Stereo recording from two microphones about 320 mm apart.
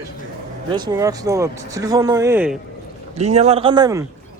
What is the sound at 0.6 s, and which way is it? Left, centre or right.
Speech, centre.